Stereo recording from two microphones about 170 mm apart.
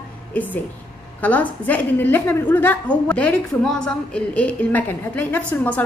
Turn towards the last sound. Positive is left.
turn(degrees=10)  # may be behind; listen again after turning